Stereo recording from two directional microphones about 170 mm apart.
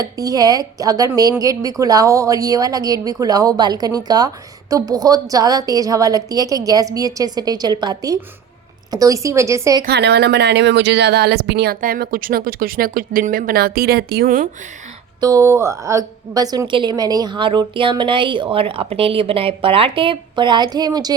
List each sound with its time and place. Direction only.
0.0 s a woman's voice: 20° right (ahead or behind)
9.8 s speech: 75° right (ahead or behind); by 14.5 s 55° right (ahead or behind)
15.2 s a woman's voice: 20° right (ahead or behind)